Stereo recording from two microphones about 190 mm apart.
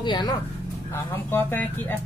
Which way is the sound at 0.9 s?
10° left (ahead or behind).